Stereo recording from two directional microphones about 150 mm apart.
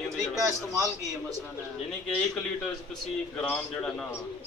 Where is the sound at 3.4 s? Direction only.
5° left (ahead or behind).